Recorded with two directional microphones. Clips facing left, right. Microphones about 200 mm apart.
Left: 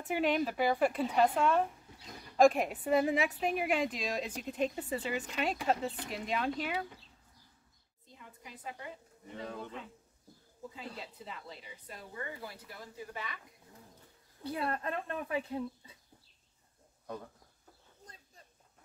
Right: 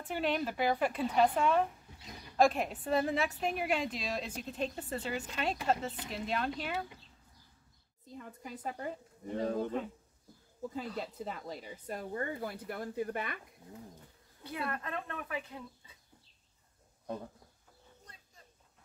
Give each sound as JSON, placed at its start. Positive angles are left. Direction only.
{"t": 0.1, "sound": "a woman's voice", "side_deg": 10}
{"t": 1.3, "sound": "speech", "side_deg": -5}
{"t": 2.5, "sound": "a woman's voice", "side_deg": 10}
{"t": 8.1, "sound": "speech", "side_deg": -45}
{"t": 11.0, "sound": "speech", "side_deg": -45}
{"t": 14.4, "sound": "a woman's voice", "side_deg": 30}